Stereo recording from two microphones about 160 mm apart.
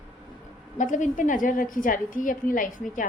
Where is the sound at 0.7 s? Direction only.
50° left (ahead or behind).